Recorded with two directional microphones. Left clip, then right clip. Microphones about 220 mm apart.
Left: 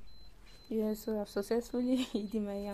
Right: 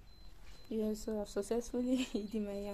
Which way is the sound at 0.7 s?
15° left (ahead or behind).